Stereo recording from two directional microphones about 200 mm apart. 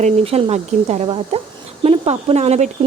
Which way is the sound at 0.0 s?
30° right (ahead or behind).